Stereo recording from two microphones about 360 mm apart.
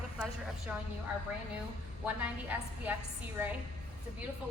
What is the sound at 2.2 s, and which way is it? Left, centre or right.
Speech, centre.